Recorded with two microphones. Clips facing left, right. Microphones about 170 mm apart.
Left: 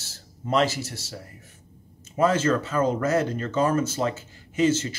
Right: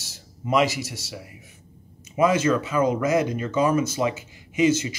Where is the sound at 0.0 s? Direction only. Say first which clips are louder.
Right 2 dB; 10° right (ahead or behind).